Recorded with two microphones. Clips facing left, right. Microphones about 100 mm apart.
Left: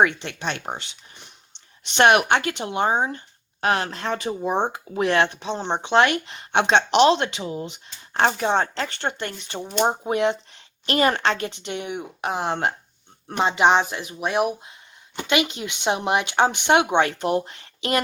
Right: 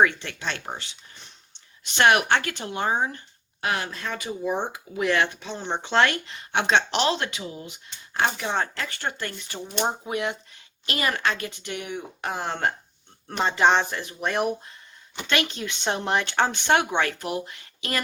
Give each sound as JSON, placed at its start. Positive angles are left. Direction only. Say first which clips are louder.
{"t": 0.0, "sound": "speech", "louder": "left 1 dB", "side_deg": 20}
{"t": 3.6, "sound": "speech", "louder": "left 5 dB", "side_deg": 50}
{"t": 5.4, "sound": "speech", "louder": "left 5 dB", "side_deg": 20}